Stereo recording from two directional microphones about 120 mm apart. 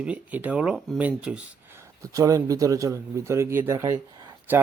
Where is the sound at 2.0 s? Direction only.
30° right (ahead or behind).